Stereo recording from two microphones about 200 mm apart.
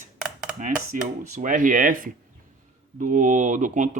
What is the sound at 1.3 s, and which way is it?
Speech, 40° right (ahead or behind).